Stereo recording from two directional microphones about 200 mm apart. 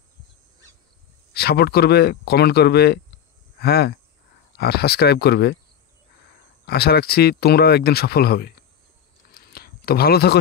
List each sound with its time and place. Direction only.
1.3 s speech: 50° left (ahead or behind)
6.6 s speech: 50° left (ahead or behind)
9.3 s a sound: 50° left (ahead or behind)